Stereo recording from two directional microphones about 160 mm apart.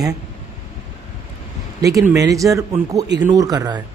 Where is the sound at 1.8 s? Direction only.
20° right (ahead or behind).